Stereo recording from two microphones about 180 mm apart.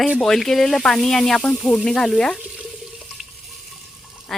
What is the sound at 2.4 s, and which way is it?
Water, 5° right (ahead or behind).